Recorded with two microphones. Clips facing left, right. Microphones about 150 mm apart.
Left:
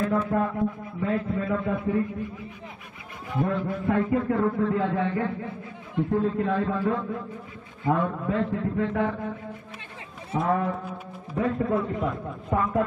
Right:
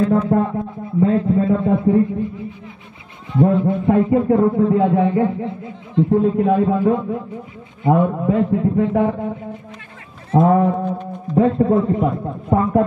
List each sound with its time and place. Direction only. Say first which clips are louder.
0.0 s a man's voice: right 8 dB; 30° right (ahead or behind)
10.4 s a man's voice: right 10 dB; 25° right (ahead or behind)